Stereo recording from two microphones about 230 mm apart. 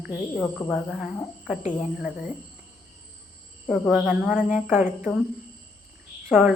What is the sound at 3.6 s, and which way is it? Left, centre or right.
Speech, centre.